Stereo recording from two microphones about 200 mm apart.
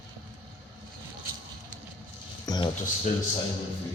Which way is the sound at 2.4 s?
20° left (ahead or behind).